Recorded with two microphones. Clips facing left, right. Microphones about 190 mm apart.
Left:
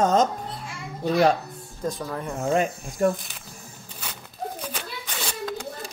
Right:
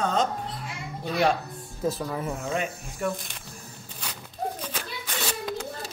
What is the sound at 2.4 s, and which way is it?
Mantra, 40° left (ahead or behind).